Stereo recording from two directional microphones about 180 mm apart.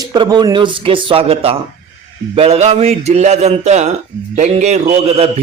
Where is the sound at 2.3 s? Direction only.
35° right (ahead or behind).